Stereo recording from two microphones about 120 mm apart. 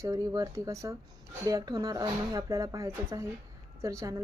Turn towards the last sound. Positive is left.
turn(degrees=-25)  # may be behind; listen again after turning